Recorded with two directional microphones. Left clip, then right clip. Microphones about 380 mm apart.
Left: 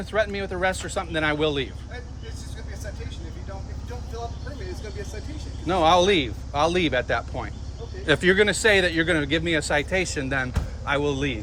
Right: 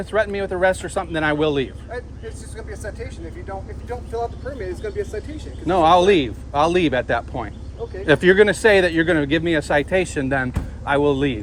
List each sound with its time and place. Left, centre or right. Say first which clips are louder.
0.0 s speech: right 4 dB; centre
5.6 s speech: right 5 dB; centre